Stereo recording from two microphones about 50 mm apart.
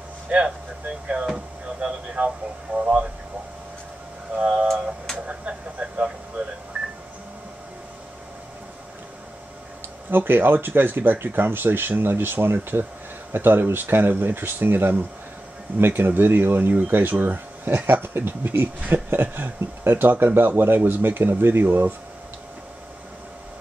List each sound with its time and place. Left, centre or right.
0.3 s speech: right
4.4 s speech: centre
6.7 s telephone dialing: right
10.1 s speech: right